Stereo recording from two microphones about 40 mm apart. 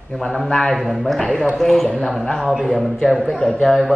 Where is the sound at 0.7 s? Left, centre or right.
Centre.